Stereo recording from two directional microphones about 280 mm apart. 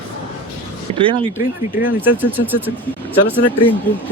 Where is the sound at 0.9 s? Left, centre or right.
Centre.